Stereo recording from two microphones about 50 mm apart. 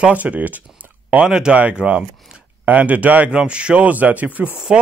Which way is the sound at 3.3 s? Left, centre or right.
Right.